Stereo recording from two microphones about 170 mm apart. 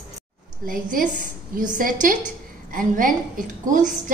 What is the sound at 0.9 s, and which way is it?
A woman's voice, 50° right (ahead or behind).